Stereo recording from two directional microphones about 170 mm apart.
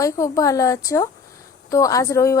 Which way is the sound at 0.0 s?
20° left (ahead or behind).